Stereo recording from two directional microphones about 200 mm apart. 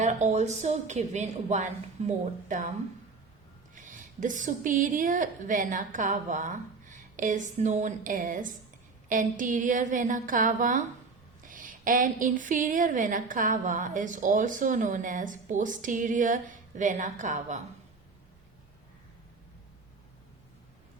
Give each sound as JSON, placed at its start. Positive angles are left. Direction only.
{"t": 0.0, "sound": "a woman's voice", "side_deg": -35}
{"t": 3.8, "sound": "a woman's voice", "side_deg": -40}